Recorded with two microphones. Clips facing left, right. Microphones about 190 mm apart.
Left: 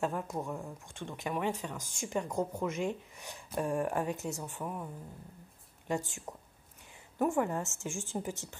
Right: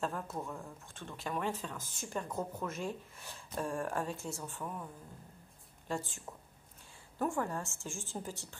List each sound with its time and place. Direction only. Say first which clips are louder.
0.0 s speech: left 4 dB; 15° left (ahead or behind)
5.9 s a woman's voice: left 4 dB; 15° left (ahead or behind)